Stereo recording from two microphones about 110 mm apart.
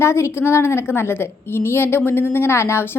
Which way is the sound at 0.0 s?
25° left (ahead or behind).